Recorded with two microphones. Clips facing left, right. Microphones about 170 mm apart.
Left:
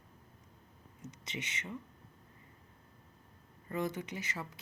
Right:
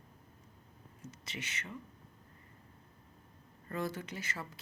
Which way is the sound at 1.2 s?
20° left (ahead or behind).